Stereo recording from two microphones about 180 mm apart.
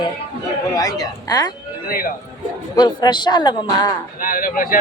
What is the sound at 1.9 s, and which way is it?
Speech, 55° left (ahead or behind).